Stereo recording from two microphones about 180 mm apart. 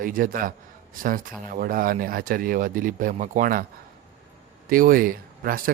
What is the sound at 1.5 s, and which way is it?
Speech, 50° right (ahead or behind).